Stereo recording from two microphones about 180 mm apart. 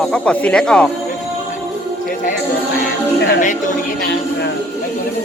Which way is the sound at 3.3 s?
45° left (ahead or behind).